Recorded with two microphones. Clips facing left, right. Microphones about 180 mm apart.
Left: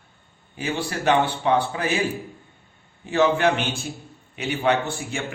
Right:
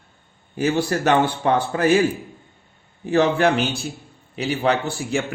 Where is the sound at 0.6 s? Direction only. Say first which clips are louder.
Right 7 dB; 40° right (ahead or behind).